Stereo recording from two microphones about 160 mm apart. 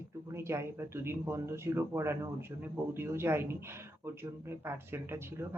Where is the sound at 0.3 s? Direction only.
15° right (ahead or behind).